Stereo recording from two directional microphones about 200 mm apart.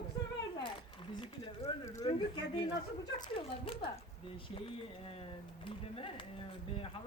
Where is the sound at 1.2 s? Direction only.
25° left (ahead or behind).